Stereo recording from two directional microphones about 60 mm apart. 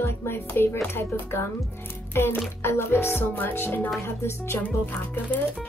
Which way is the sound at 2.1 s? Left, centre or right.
Left.